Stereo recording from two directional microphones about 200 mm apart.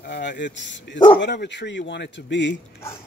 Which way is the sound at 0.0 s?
55° left (ahead or behind).